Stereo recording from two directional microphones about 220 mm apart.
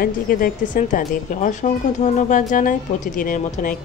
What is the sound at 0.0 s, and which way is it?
A woman's voice, 40° left (ahead or behind).